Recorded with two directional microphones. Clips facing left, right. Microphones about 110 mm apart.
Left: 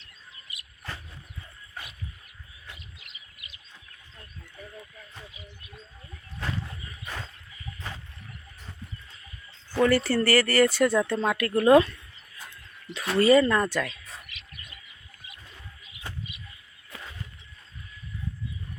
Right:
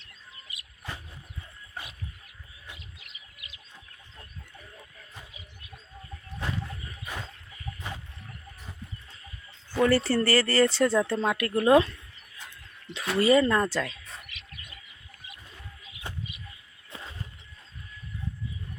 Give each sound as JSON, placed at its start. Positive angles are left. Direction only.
{"t": 0.8, "sound": "a sound", "side_deg": -15}
{"t": 7.0, "sound": "bird", "side_deg": -5}
{"t": 9.9, "sound": "a woman's voice", "side_deg": -30}
{"t": 13.1, "sound": "a woman's voice", "side_deg": -20}
{"t": 16.1, "sound": "bird", "side_deg": -20}
{"t": 16.9, "sound": "a sound", "side_deg": -25}